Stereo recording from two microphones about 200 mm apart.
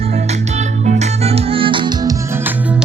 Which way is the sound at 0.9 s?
35° right (ahead or behind).